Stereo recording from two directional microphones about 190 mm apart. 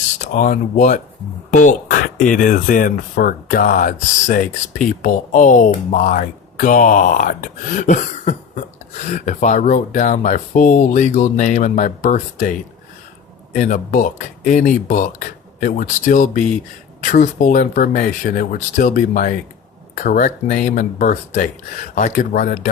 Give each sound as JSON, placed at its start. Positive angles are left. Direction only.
{"t": 0.2, "sound": "speech", "side_deg": 45}